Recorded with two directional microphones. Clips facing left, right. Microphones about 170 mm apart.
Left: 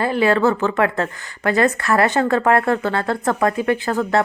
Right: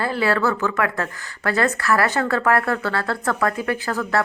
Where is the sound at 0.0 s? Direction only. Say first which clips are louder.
Left 4 dB; 20° left (ahead or behind).